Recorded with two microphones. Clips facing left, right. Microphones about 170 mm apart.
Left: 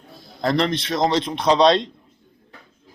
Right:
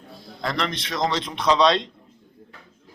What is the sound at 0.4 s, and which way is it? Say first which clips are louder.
A man's voice: left 7 dB; 35° left (ahead or behind).